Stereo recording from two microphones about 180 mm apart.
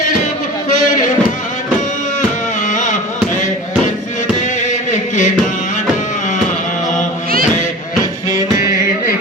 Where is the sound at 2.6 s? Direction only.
45° left (ahead or behind).